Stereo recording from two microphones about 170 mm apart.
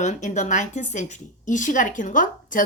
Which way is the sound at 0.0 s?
45° left (ahead or behind).